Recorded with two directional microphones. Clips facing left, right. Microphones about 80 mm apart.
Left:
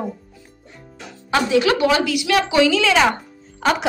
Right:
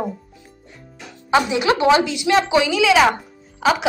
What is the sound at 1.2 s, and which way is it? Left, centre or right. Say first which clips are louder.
A woman's voice: even; right.